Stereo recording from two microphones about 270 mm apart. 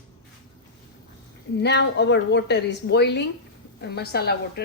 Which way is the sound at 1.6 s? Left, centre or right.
Left.